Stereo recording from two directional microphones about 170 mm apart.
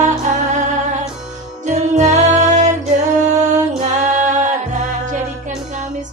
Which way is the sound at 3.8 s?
45° right (ahead or behind).